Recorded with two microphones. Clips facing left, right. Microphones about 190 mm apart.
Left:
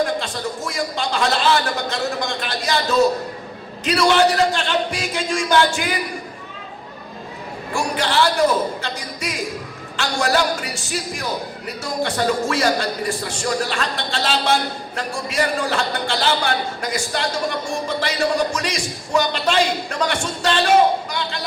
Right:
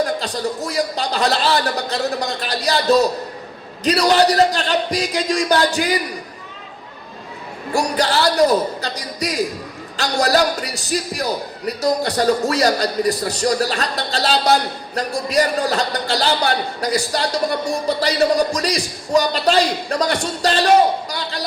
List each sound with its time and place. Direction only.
0.2 s a man's voice: 35° right (ahead or behind)
7.7 s a man's voice: 40° right (ahead or behind)